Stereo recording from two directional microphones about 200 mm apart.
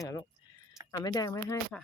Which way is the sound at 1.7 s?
5° left (ahead or behind).